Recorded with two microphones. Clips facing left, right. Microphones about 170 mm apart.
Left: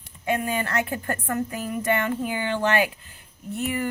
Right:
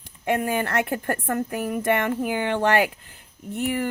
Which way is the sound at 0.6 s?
50° right (ahead or behind).